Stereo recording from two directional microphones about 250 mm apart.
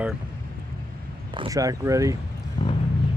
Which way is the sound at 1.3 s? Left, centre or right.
Centre.